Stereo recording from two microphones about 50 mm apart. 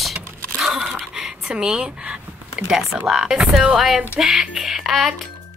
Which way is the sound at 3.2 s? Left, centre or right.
Centre.